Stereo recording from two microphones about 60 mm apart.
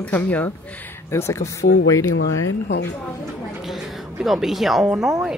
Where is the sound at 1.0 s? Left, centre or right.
Left.